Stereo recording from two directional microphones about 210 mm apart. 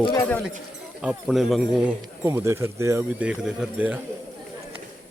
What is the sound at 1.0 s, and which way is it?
Speech, 5° right (ahead or behind).